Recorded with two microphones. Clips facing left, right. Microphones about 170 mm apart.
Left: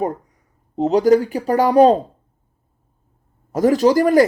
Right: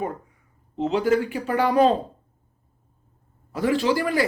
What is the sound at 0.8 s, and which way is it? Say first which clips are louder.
Speech: left 7 dB; 40° left (ahead or behind).